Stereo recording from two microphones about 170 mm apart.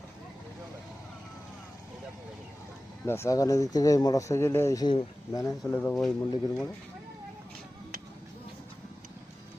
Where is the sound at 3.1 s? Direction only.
15° left (ahead or behind).